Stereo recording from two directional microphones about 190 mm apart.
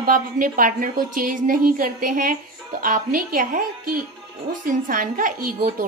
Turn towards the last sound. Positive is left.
turn(degrees=-45)  # may be behind; listen again after turning